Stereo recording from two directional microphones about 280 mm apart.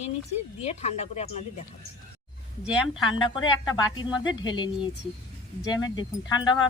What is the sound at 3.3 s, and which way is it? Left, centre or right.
Speech, centre.